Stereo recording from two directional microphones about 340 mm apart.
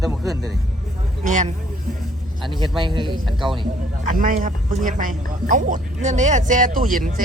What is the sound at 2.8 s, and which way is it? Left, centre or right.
Speech, centre.